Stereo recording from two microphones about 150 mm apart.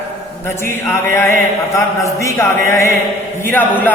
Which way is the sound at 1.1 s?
20° left (ahead or behind).